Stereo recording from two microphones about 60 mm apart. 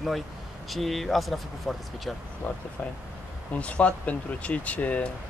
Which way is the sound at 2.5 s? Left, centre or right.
Left.